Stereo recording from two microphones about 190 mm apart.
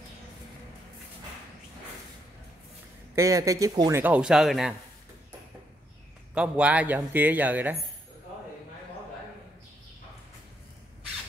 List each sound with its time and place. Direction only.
3.2 s speech: 15° right (ahead or behind)
4.0 s speech: 5° right (ahead or behind)
6.3 s speech: 5° right (ahead or behind)